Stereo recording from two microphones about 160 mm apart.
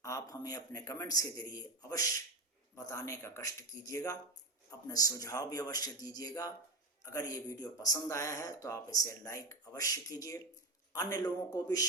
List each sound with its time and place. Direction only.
0.0 s speech: 20° left (ahead or behind)